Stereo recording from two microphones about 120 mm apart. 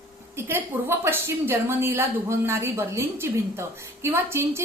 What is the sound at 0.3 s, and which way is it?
A woman's voice, 20° right (ahead or behind).